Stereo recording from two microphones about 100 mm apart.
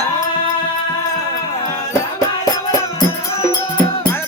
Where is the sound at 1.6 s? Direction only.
35° left (ahead or behind).